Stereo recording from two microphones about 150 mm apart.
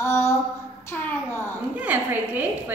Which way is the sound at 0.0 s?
15° left (ahead or behind).